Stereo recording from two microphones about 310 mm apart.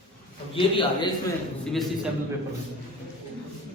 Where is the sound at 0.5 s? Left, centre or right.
Centre.